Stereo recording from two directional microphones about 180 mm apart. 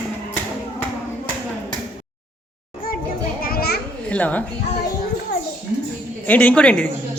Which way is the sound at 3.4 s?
55° left (ahead or behind).